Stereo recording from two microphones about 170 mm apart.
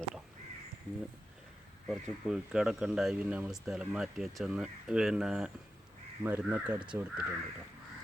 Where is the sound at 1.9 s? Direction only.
Centre (ahead or behind).